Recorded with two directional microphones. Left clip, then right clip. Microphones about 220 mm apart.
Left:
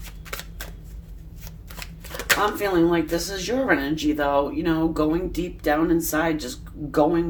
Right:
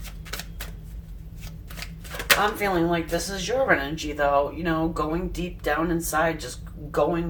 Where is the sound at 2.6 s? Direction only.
40° left (ahead or behind).